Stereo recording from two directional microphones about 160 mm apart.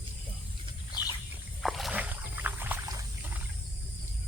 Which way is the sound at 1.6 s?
Centre (ahead or behind).